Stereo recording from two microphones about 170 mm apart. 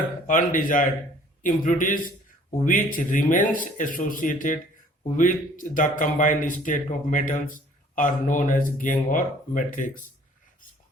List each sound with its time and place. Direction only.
0.3 s speech: 50° left (ahead or behind)